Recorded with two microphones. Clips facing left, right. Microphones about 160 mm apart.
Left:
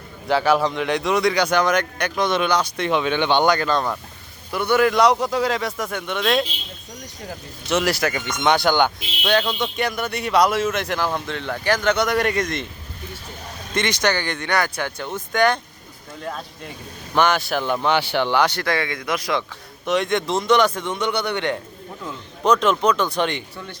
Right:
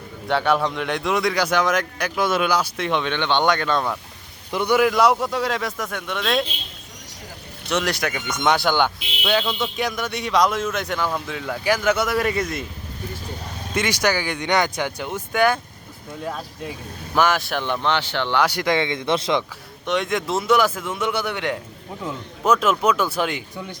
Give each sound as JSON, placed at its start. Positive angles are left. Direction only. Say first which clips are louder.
{"t": 0.3, "sound": "speech", "louder": "left 2 dB", "side_deg": 0}
{"t": 4.5, "sound": "speech", "louder": "even", "side_deg": -15}
{"t": 7.7, "sound": "speech", "louder": "left 3 dB", "side_deg": 0}
{"t": 13.7, "sound": "speech", "louder": "even", "side_deg": -10}
{"t": 18.3, "sound": "speech", "louder": "right 4 dB", "side_deg": -10}
{"t": 19.8, "sound": "speech", "louder": "left 2 dB", "side_deg": 0}